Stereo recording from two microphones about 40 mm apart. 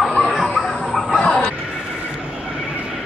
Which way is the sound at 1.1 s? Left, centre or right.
Centre.